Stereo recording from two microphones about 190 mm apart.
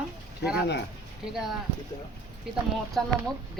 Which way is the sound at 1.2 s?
Centre (ahead or behind).